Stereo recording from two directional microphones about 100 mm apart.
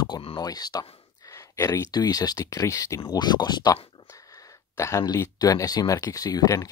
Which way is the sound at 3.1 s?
45° left (ahead or behind).